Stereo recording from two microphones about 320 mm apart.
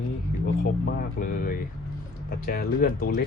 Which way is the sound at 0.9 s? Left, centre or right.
Left.